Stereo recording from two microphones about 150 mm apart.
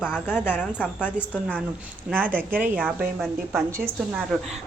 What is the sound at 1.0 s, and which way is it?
Speech, 10° left (ahead or behind).